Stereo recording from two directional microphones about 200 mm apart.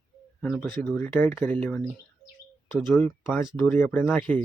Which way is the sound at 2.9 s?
5° left (ahead or behind).